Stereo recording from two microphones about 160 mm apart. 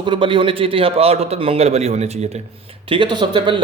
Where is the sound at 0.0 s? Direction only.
30° right (ahead or behind).